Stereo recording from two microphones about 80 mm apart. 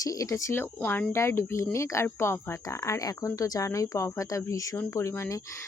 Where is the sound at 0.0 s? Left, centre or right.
Left.